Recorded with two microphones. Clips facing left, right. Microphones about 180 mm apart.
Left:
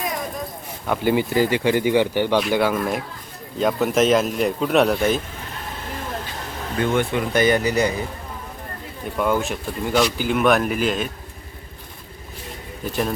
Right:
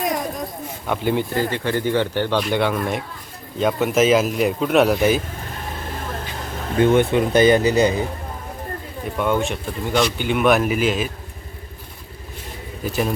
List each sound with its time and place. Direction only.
0.9 s speech: 5° left (ahead or behind)
6.7 s speech: 20° right (ahead or behind)
9.0 s speech: centre (ahead or behind)
12.8 s speech: 5° right (ahead or behind)